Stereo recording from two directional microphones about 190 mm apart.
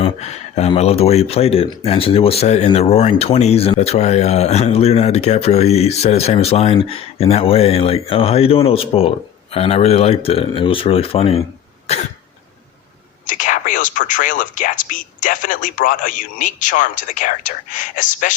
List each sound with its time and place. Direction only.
0.0 s speech: 35° left (ahead or behind)
13.2 s speech: 45° left (ahead or behind)